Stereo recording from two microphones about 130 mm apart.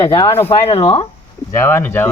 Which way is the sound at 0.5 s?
45° left (ahead or behind).